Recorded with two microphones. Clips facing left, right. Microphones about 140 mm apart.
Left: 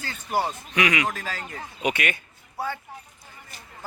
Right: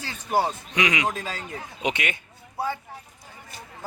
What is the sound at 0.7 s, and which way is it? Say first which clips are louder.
Speech: left 2 dB; 20° right (ahead or behind).